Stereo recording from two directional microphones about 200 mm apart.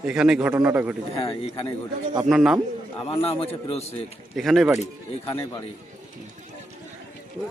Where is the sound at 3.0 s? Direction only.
30° left (ahead or behind).